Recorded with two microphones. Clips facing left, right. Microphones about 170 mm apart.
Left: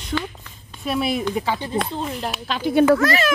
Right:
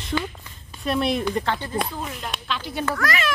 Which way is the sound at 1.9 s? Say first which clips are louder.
Left 5 dB; 25° left (ahead or behind).